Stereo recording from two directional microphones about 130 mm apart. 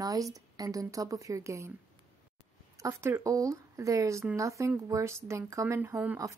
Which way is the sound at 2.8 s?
20° right (ahead or behind).